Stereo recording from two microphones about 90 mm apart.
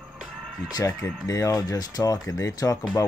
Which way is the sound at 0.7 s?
40° left (ahead or behind).